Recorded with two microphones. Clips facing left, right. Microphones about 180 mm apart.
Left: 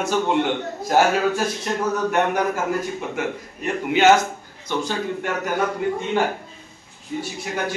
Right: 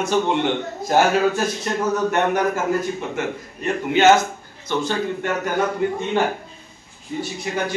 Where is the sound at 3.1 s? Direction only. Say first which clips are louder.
Right 1 dB; 10° left (ahead or behind).